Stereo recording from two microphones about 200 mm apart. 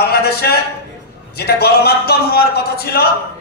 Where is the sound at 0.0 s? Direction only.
50° left (ahead or behind).